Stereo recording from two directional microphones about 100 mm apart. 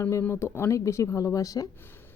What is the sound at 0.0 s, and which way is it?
Speech, 25° left (ahead or behind).